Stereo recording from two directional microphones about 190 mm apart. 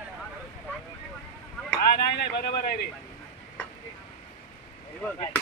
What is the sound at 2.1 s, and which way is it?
Speech, 60° left (ahead or behind).